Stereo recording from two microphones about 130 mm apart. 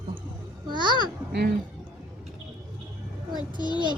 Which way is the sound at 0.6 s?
35° right (ahead or behind).